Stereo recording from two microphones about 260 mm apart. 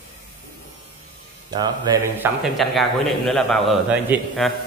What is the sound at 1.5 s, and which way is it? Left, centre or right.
Speech, centre.